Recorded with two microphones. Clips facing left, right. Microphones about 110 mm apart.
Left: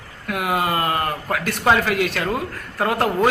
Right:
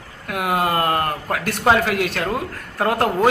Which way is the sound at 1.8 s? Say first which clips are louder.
Even; 55° right (ahead or behind).